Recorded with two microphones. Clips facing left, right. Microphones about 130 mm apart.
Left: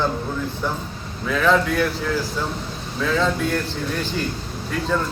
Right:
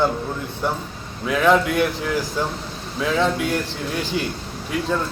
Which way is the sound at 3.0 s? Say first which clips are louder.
Right 1 dB; 15° right (ahead or behind).